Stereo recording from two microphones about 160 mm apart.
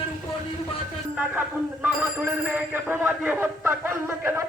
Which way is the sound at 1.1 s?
10° right (ahead or behind).